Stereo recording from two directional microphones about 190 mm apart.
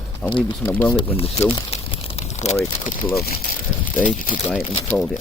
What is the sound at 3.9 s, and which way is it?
Speech, 45° left (ahead or behind).